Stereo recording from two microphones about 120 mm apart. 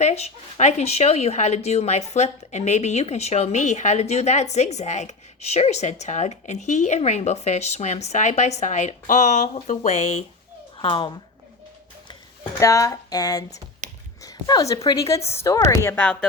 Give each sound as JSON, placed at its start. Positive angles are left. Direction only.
{"t": 0.0, "sound": "a woman's voice", "side_deg": 70}
{"t": 10.8, "sound": "speech", "side_deg": 45}
{"t": 12.5, "sound": "a woman's voice", "side_deg": 30}
{"t": 13.8, "sound": "a sound", "side_deg": -90}
{"t": 14.3, "sound": "a woman's voice", "side_deg": 30}